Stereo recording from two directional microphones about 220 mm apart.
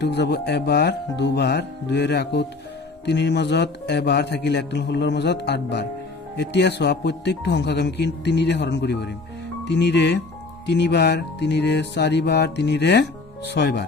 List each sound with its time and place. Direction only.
0.0 s music: 50° left (ahead or behind)